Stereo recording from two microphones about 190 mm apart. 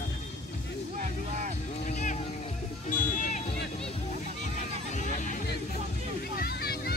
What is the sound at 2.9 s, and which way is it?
Music, 40° left (ahead or behind).